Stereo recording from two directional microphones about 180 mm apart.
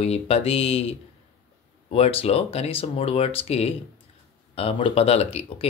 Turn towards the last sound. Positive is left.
turn(degrees=35)  # may be behind; listen again after turning